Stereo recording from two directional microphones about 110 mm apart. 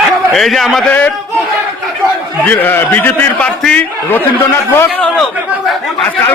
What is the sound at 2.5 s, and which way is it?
A man's voice, 20° left (ahead or behind).